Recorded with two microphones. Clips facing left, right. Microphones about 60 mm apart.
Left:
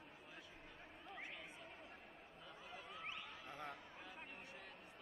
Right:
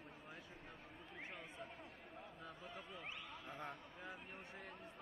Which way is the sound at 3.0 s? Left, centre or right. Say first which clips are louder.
Even; centre.